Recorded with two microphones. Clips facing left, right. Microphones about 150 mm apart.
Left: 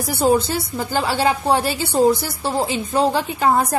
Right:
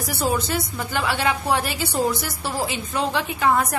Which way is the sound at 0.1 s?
30° left (ahead or behind).